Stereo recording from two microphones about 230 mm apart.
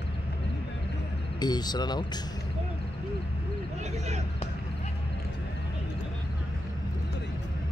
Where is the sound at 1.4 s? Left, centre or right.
Centre.